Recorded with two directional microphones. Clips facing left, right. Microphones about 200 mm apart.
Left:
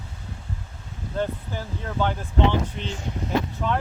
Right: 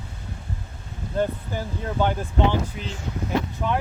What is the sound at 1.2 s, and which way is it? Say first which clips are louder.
Speech: right 3 dB; 15° right (ahead or behind).